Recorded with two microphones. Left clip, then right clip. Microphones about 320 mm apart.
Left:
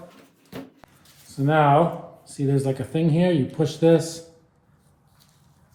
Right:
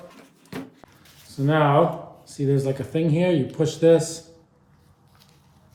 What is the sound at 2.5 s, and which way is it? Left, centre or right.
A man's voice, left.